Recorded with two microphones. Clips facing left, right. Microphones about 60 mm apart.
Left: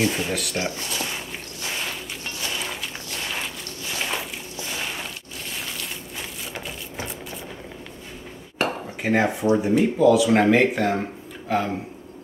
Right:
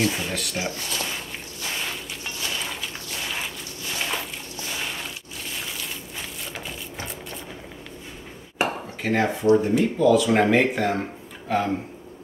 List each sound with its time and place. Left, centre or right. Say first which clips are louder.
0.0 s a sound: left 2 dB; centre
8.6 s dishes: even; centre
9.0 s speech: even; centre
9.8 s speech: left 2 dB; centre